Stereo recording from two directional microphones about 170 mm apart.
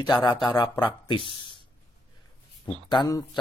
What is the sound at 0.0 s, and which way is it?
Speech, 25° left (ahead or behind).